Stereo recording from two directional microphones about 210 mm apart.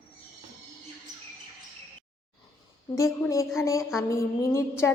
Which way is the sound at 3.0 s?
15° left (ahead or behind).